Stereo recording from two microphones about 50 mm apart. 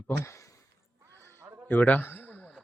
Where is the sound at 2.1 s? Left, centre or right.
Left.